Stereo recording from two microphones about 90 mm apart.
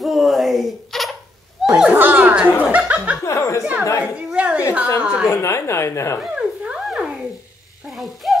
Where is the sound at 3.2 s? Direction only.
35° left (ahead or behind).